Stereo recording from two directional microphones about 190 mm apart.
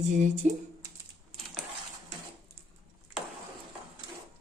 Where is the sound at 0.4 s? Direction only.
40° right (ahead or behind).